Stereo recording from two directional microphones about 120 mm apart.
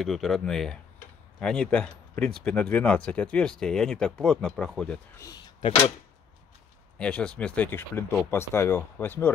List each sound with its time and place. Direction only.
0.0 s speech: centre (ahead or behind)
7.0 s speech: 10° left (ahead or behind)